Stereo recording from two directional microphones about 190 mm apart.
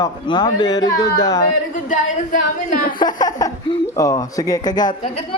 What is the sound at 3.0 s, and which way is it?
A man's voice, 20° left (ahead or behind).